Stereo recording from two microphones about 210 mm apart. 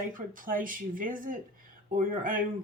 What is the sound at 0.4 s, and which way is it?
Speech, 40° right (ahead or behind).